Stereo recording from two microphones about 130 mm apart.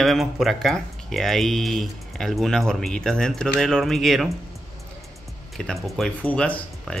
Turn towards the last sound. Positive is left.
turn(degrees=10)  # may be behind; listen again after turning